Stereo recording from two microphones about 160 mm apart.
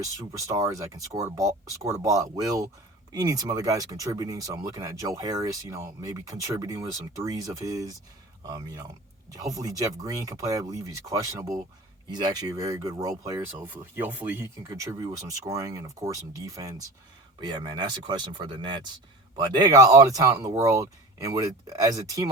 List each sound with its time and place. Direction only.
0.2 s speech: 20° right (ahead or behind)